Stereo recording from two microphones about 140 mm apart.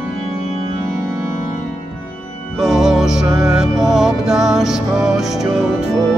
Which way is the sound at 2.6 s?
5° right (ahead or behind).